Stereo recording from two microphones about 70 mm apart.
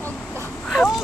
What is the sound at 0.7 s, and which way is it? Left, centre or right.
Speech, centre.